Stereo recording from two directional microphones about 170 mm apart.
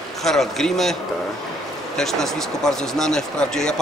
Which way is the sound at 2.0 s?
Centre (ahead or behind).